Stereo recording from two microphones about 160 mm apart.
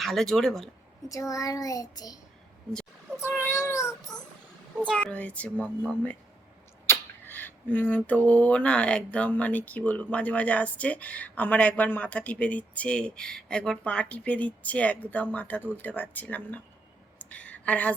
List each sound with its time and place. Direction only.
0.0 s speech: centre (ahead or behind)
1.0 s child singing: 20° left (ahead or behind)
3.4 s child singing: 15° left (ahead or behind)
4.9 s a sound: 5° left (ahead or behind)
5.6 s speech: 5° right (ahead or behind)
6.8 s a sound: 15° left (ahead or behind)